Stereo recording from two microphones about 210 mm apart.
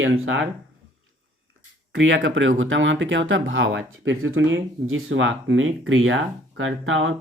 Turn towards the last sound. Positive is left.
turn(degrees=-70)  # may be behind; listen again after turning